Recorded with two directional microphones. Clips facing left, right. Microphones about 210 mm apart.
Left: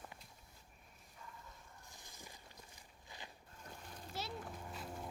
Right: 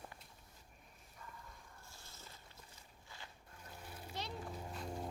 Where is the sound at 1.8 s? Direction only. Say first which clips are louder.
Left 3 dB; 15° left (ahead or behind).